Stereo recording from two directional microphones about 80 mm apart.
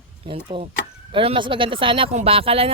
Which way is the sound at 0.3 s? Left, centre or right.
Right.